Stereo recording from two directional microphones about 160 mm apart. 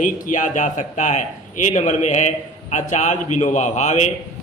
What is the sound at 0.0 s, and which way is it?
A man's voice, 50° left (ahead or behind).